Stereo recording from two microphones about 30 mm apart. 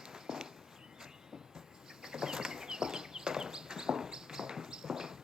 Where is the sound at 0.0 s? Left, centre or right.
Centre.